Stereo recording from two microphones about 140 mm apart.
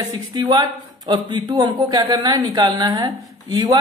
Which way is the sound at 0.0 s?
30° right (ahead or behind).